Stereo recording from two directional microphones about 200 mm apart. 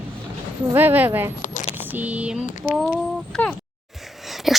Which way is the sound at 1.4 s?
40° left (ahead or behind).